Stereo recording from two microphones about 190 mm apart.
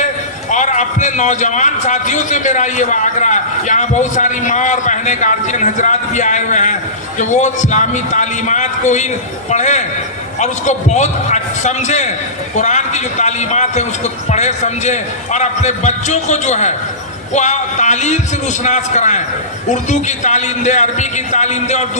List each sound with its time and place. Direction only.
0.5 s a man's voice: 40° left (ahead or behind)